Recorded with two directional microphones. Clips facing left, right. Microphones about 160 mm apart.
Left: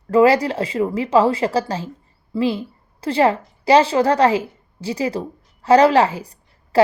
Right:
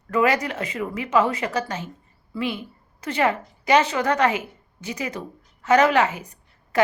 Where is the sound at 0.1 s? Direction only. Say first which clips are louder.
Left 7 dB; 30° left (ahead or behind).